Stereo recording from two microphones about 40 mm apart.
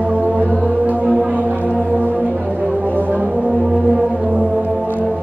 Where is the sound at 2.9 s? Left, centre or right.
Right.